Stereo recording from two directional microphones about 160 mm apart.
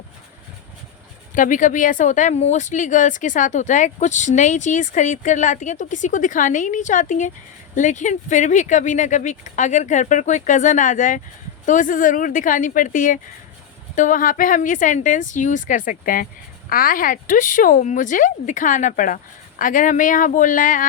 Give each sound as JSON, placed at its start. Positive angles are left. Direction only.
{"t": 1.4, "sound": "speech", "side_deg": 55}